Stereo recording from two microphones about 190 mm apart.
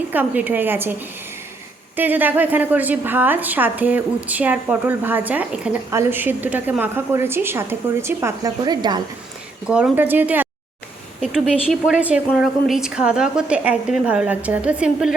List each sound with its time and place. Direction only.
0.1 s a woman's voice: 10° right (ahead or behind)
9.6 s a woman's voice: 5° right (ahead or behind)